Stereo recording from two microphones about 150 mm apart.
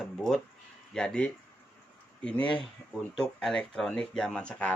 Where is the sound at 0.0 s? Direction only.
5° left (ahead or behind).